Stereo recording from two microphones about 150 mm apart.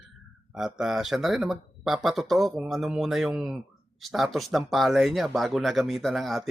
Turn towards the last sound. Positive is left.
turn(degrees=0)  # may be behind; listen again after turning